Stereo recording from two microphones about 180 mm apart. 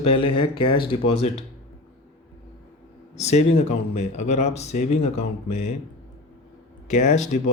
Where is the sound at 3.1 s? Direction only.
35° left (ahead or behind).